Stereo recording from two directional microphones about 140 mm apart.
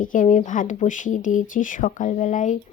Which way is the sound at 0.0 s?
70° left (ahead or behind).